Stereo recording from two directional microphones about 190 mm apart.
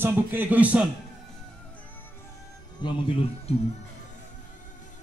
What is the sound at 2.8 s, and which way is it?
Speech, 25° left (ahead or behind).